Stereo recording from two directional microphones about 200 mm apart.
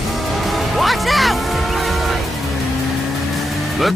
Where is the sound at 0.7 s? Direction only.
Centre (ahead or behind).